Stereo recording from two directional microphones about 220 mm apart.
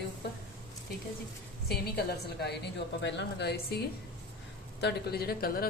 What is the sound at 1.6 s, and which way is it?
A woman's voice, 45° left (ahead or behind).